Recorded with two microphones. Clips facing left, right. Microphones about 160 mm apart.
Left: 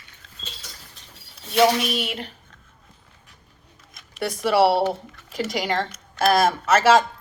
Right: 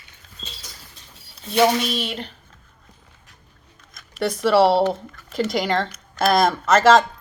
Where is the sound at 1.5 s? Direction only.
5° left (ahead or behind).